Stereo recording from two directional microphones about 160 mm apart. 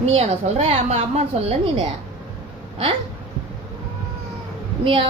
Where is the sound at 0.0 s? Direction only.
40° right (ahead or behind).